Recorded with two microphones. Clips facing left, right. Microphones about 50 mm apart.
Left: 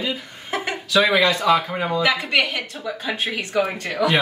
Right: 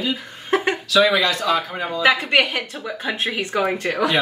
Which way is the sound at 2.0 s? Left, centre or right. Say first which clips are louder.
Right 5 dB; right.